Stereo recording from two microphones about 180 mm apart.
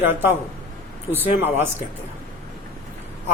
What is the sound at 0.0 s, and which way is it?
Speech, 10° right (ahead or behind).